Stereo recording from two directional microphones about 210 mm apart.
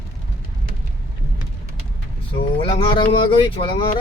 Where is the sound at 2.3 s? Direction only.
25° left (ahead or behind).